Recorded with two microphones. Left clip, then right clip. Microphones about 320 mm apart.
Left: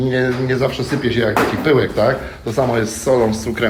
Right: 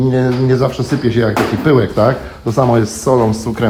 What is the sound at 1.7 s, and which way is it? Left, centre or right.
Speech, centre.